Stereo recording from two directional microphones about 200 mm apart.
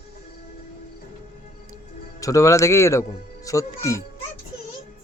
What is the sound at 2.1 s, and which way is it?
Speech, 15° left (ahead or behind).